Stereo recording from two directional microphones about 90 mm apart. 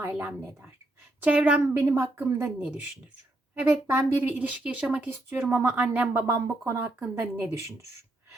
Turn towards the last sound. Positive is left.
turn(degrees=-30)  # may be behind; listen again after turning